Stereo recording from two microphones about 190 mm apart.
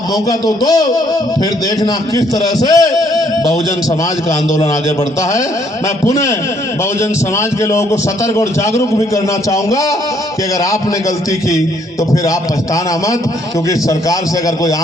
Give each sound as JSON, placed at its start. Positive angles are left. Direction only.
{"t": 0.3, "sound": "a man's voice", "side_deg": 20}
{"t": 6.1, "sound": "a man's voice", "side_deg": 15}
{"t": 11.3, "sound": "a man's voice", "side_deg": 15}